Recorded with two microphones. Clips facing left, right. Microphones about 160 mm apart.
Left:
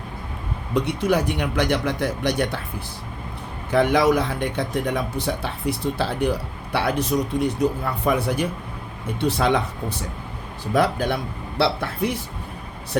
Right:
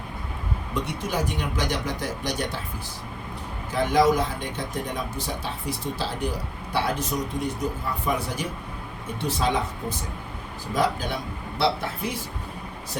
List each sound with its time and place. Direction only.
0.7 s speech: 65° left (ahead or behind)
3.7 s speech: 65° left (ahead or behind)
10.8 s speech: 65° left (ahead or behind)